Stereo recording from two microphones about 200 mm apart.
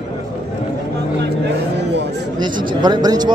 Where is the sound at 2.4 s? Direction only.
20° right (ahead or behind).